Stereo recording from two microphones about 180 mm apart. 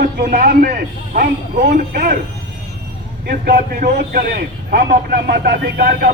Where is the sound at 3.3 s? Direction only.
55° right (ahead or behind).